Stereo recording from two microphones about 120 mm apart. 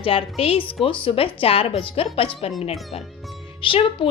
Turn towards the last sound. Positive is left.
turn(degrees=45)  # may be behind; listen again after turning